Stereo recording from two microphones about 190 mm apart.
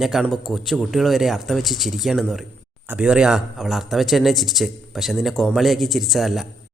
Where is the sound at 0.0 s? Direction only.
Centre (ahead or behind).